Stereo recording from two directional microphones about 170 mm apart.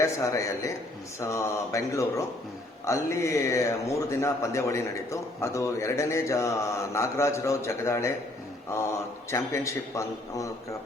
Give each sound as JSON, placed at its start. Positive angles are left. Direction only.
{"t": 0.0, "sound": "a man's voice", "side_deg": 20}